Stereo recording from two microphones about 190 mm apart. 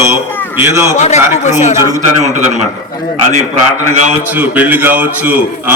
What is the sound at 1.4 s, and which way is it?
Speech, 40° left (ahead or behind).